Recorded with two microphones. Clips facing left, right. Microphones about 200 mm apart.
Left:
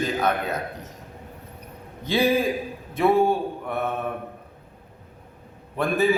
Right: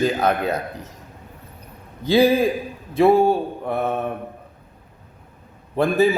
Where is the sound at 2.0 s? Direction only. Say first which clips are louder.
Right 5 dB; 35° right (ahead or behind).